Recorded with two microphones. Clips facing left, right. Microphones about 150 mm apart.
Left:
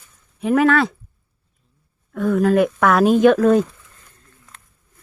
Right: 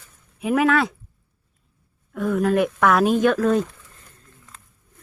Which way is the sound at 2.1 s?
Centre (ahead or behind).